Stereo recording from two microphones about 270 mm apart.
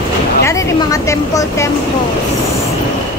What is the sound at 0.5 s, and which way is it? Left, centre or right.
A woman's voice, centre.